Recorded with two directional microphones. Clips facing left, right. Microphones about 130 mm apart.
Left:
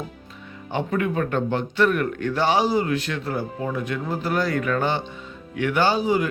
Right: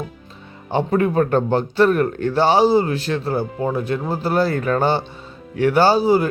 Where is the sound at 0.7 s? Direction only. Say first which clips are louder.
Right 6 dB; 35° right (ahead or behind).